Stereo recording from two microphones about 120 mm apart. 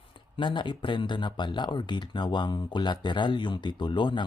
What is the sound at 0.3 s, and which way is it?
Speech, 40° left (ahead or behind).